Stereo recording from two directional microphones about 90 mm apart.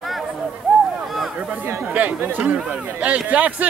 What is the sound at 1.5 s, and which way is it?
Speech, 25° right (ahead or behind).